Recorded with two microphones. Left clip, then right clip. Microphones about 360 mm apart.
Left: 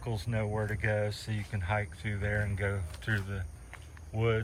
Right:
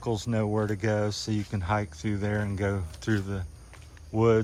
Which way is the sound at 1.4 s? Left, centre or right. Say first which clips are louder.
Right 3 dB; right.